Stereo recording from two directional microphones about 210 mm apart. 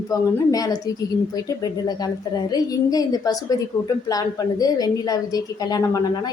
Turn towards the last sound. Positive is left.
turn(degrees=15)  # may be behind; listen again after turning